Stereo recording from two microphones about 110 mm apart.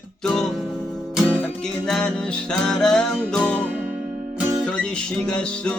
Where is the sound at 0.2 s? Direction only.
5° left (ahead or behind).